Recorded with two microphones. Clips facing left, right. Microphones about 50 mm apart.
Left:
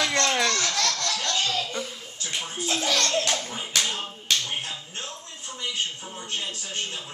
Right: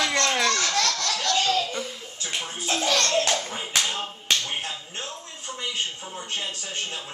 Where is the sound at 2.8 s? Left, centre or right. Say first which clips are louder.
Right 3 dB; centre.